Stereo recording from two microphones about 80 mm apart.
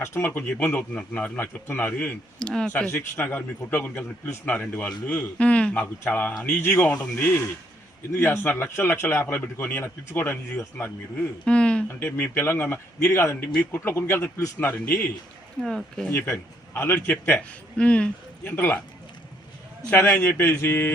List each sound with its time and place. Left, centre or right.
0.0 s speech: left
0.3 s a man's voice: left
2.9 s a man's voice: left
5.8 s a man's voice: left
8.1 s a man's voice: left
11.4 s a man's voice: centre; by 14.5 s left
14.6 s a man's voice: left
15.6 s speech: centre
16.9 s a man's voice: left
17.7 s speech: centre
18.4 s a man's voice: left
19.9 s a man's voice: left